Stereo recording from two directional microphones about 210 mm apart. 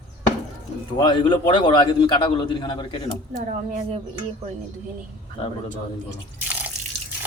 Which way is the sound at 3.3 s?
35° right (ahead or behind).